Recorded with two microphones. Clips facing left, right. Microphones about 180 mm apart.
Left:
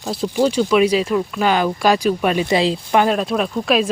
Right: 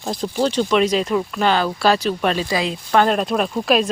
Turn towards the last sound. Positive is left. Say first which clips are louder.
# even
turn(degrees=0)  # may be behind; listen again after turning